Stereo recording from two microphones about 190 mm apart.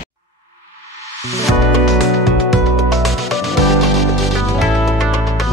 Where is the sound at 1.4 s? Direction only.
Centre (ahead or behind).